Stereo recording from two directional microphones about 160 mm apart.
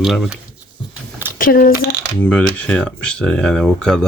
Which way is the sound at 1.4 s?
60° left (ahead or behind).